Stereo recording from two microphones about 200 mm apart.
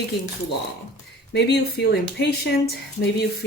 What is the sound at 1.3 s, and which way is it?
Speech, 60° left (ahead or behind).